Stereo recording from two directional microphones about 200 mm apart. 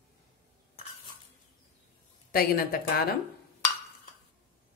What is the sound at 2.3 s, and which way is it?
Speech, 50° left (ahead or behind).